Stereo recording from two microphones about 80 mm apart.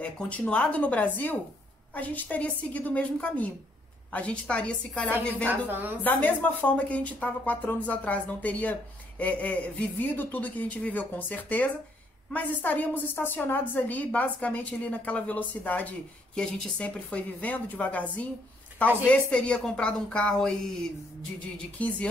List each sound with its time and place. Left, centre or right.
0.0 s a woman's voice: centre
5.5 s a woman's voice: right
6.0 s a woman's voice: left
16.5 s speech: centre
16.8 s a woman's voice: centre
19.0 s speech: centre